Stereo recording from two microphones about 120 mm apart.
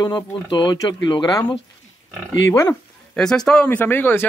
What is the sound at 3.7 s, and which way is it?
Speech, 15° left (ahead or behind).